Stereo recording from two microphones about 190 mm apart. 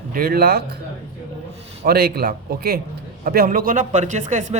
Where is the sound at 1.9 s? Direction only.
55° right (ahead or behind).